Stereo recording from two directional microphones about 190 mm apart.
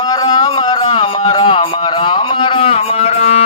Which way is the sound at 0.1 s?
20° left (ahead or behind).